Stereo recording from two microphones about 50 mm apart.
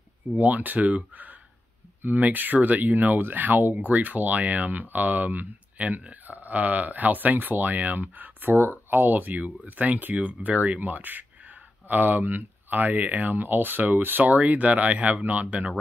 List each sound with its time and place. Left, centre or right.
0.4 s speech: right